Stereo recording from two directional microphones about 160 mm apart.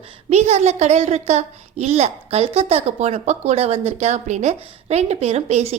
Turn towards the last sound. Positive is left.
turn(degrees=-40)  # may be behind; listen again after turning